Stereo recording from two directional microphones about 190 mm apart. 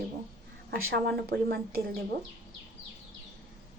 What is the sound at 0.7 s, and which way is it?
Speech, 55° right (ahead or behind).